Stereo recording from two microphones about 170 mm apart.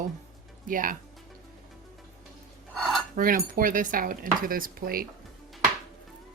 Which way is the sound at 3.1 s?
55° right (ahead or behind).